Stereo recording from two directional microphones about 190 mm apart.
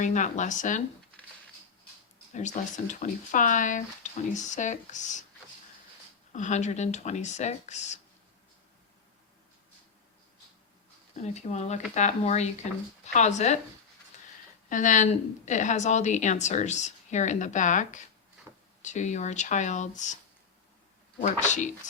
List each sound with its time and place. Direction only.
0.0 s a woman's voice: 40° left (ahead or behind)
2.3 s a woman's voice: 40° left (ahead or behind)
6.3 s a woman's voice: 40° left (ahead or behind)
11.2 s a woman's voice: 35° left (ahead or behind)
14.1 s a sound: 40° left (ahead or behind)
14.7 s a woman's voice: 45° left (ahead or behind)
21.2 s a woman's voice: 40° left (ahead or behind)